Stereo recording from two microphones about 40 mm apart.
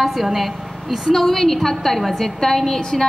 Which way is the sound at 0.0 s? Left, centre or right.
Centre.